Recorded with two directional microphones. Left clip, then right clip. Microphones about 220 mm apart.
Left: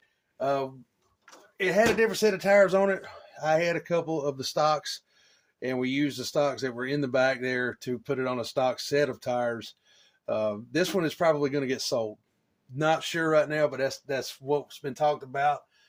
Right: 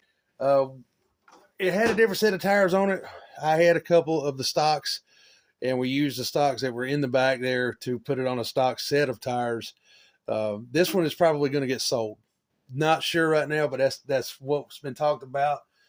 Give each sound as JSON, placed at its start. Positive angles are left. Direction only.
{"t": 0.3, "sound": "speech", "side_deg": -50}